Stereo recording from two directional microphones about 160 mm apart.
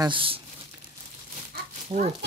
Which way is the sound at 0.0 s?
35° right (ahead or behind).